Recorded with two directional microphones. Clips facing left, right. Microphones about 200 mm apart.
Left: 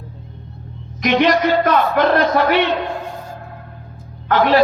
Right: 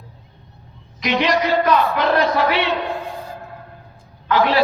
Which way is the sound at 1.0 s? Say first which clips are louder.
Left 4 dB; 45° left (ahead or behind).